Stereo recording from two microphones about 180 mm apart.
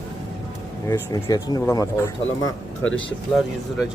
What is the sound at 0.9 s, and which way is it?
Speech, 20° left (ahead or behind).